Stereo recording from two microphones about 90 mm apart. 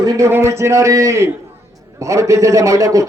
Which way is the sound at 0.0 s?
35° right (ahead or behind).